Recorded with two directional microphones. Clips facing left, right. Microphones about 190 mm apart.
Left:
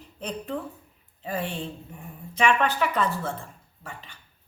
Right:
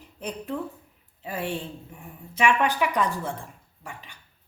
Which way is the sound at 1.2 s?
10° right (ahead or behind).